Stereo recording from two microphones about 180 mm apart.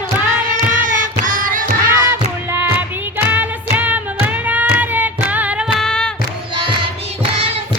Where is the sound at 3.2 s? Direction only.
10° right (ahead or behind).